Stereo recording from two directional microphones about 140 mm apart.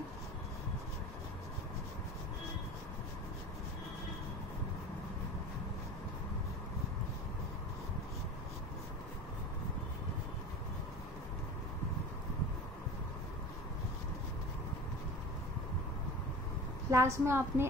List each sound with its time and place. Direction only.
16.9 s a woman's voice: 20° right (ahead or behind)